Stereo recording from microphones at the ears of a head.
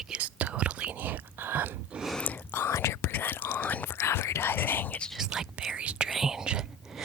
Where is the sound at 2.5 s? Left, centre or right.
Left.